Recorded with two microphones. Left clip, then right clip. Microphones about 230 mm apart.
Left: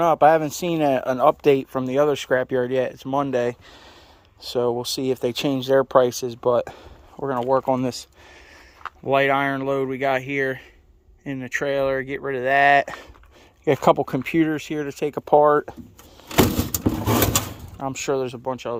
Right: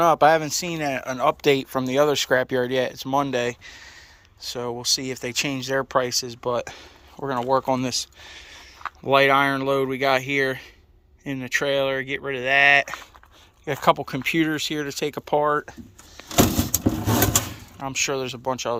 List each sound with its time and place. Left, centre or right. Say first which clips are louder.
0.0 s speech: left 1 dB; centre
4.4 s speech: left 7 dB; left
13.7 s speech: left 3 dB; left
17.5 s speech: left 1 dB; left